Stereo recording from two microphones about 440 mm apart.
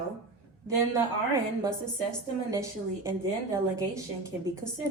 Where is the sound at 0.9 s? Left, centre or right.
Centre.